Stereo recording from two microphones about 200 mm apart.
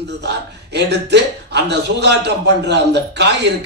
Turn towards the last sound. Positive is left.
turn(degrees=-60)  # may be behind; listen again after turning